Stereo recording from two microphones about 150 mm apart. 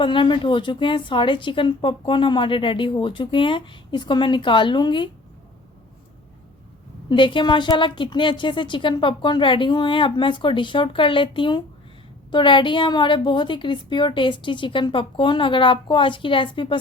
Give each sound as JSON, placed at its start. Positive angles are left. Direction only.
{"t": 0.0, "sound": "a woman's voice", "side_deg": 35}
{"t": 7.1, "sound": "a woman's voice", "side_deg": 35}